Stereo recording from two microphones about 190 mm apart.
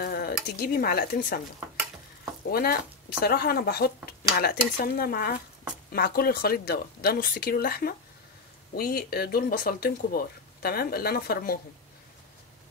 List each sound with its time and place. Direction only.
0.0 s speech: 55° left (ahead or behind)
2.5 s speech: 55° left (ahead or behind)